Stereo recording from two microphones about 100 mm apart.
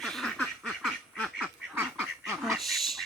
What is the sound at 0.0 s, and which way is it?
Duck, centre (ahead or behind).